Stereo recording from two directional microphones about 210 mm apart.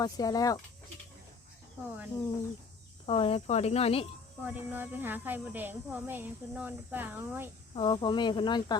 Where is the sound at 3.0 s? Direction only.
25° left (ahead or behind).